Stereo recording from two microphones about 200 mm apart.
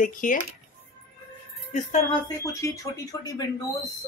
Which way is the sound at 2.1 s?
15° left (ahead or behind).